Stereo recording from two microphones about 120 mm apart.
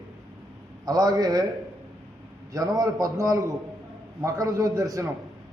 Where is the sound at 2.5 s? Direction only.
30° right (ahead or behind).